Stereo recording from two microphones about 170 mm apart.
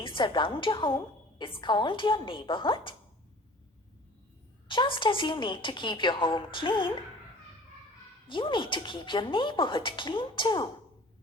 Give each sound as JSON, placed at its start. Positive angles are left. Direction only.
{"t": 0.0, "sound": "a woman's voice", "side_deg": 30}
{"t": 4.7, "sound": "a woman's voice", "side_deg": 30}
{"t": 8.3, "sound": "a woman's voice", "side_deg": 30}